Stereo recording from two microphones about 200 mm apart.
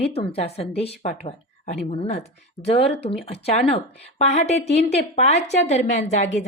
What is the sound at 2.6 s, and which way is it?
Speech, 30° left (ahead or behind).